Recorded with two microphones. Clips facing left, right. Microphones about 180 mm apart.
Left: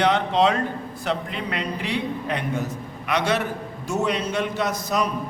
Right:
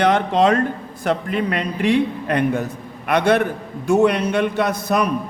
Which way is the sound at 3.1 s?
55° right (ahead or behind).